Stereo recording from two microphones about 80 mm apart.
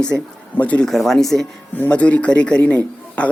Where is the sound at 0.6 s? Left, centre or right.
Centre.